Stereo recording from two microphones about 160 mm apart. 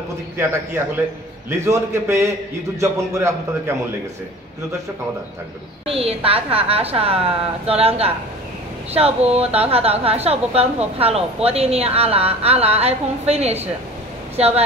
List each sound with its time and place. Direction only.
0.4 s a man's voice: 15° right (ahead or behind)
5.9 s a woman's voice: 35° right (ahead or behind)